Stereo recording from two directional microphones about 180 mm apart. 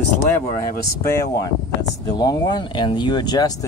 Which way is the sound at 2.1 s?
20° left (ahead or behind).